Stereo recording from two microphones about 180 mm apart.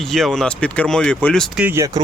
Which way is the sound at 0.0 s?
Centre (ahead or behind).